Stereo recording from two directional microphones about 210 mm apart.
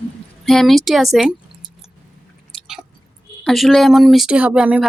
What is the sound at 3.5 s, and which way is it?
Speech, centre (ahead or behind).